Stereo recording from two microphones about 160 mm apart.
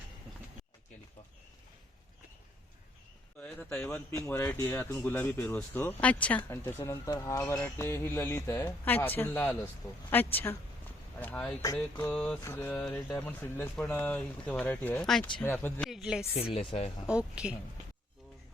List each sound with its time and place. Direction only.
3.4 s speech: 5° left (ahead or behind)
15.9 s speech: 5° right (ahead or behind)
16.3 s speech: 40° left (ahead or behind)
17.1 s speech: 5° right (ahead or behind)